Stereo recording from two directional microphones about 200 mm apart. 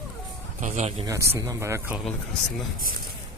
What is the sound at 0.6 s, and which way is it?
Speech, 35° right (ahead or behind).